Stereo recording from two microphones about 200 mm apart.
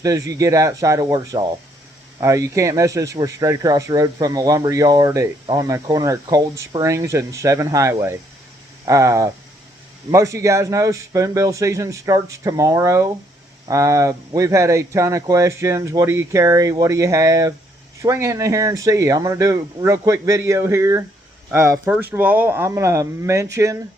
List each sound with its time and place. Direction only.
0.0 s speech: 15° right (ahead or behind)